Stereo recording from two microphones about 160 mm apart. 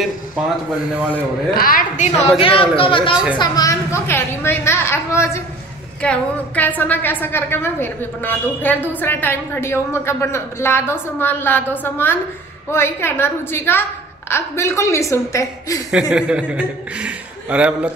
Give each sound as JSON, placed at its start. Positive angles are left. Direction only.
{"t": 1.5, "sound": "a woman's voice", "side_deg": 65}
{"t": 2.1, "sound": "a woman's voice", "side_deg": 35}
{"t": 15.9, "sound": "a man's voice", "side_deg": -5}